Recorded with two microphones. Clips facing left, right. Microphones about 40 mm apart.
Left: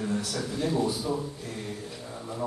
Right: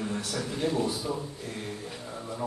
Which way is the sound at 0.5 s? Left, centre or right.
Right.